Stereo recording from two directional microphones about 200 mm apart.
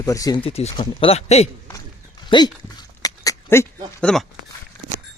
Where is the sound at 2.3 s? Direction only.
20° left (ahead or behind).